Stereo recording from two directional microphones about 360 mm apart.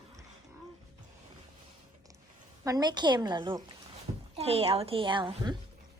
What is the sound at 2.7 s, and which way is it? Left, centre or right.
A woman's voice, centre.